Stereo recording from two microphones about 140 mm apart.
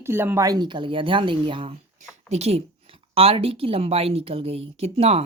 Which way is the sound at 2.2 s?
50° right (ahead or behind).